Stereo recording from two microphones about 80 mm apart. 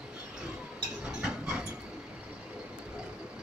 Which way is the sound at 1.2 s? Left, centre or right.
Centre.